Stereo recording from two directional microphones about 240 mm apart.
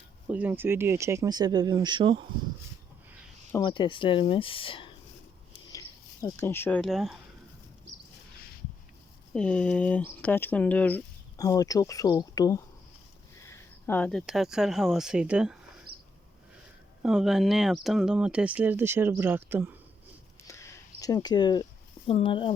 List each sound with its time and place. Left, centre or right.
0.3 s speech: centre
3.5 s speech: centre
6.2 s speech: centre
9.3 s speech: centre
17.0 s speech: centre
20.5 s a sound: centre